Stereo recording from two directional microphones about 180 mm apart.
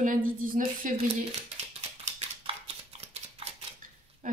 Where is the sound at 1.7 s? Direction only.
35° right (ahead or behind).